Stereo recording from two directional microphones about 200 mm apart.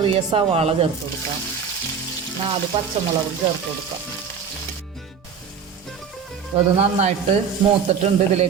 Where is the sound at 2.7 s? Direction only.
25° right (ahead or behind).